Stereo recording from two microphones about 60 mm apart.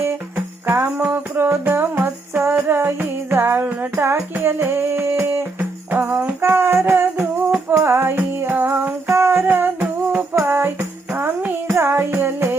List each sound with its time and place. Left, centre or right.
0.0 s music: right
0.9 s music: right
3.6 s music: right
3.9 s music: right
5.5 s music: right
9.0 s music: right
9.8 s music: right
10.5 s music: right